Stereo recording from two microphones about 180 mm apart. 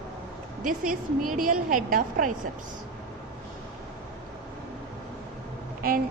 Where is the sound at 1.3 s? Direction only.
50° right (ahead or behind).